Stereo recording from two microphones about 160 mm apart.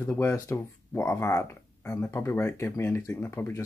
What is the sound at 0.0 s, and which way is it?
Speech, 10° left (ahead or behind).